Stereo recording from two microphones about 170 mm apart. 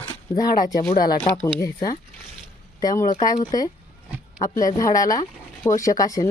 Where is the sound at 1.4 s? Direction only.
20° left (ahead or behind).